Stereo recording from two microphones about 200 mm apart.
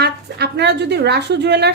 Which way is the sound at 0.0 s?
55° right (ahead or behind).